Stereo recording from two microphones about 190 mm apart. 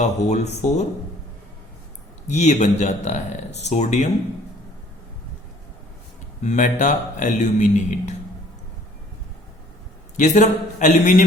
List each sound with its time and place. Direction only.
0.0 s speech: 40° left (ahead or behind)
2.2 s speech: 35° left (ahead or behind)
6.4 s speech: 40° left (ahead or behind)
10.2 s speech: 40° left (ahead or behind)